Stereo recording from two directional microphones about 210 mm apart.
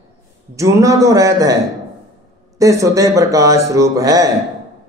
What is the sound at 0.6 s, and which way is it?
A man's voice, 15° right (ahead or behind).